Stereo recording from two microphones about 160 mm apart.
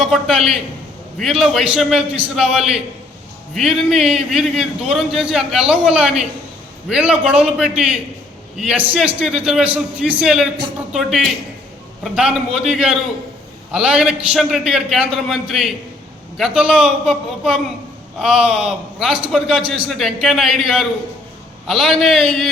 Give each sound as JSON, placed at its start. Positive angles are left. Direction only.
{"t": 0.0, "sound": "a man's voice", "side_deg": 0}